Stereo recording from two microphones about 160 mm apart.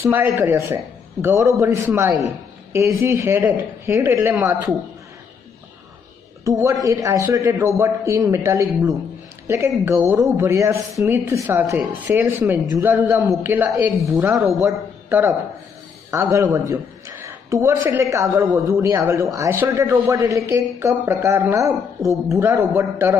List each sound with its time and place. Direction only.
0.0 s a man's voice: 10° right (ahead or behind)
6.4 s a man's voice: 20° right (ahead or behind)